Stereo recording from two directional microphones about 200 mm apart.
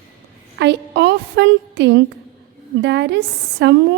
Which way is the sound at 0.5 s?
60° right (ahead or behind).